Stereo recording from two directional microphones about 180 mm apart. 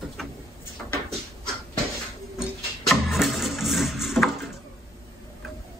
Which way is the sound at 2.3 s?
Centre (ahead or behind).